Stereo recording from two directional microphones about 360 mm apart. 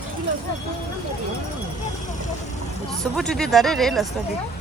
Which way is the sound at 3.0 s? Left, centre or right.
Centre.